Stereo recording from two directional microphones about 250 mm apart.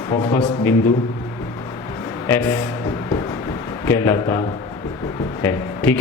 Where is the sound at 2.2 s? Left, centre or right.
Centre.